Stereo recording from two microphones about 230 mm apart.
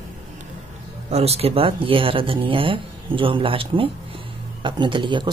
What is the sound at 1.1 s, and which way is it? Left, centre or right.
Speech, right.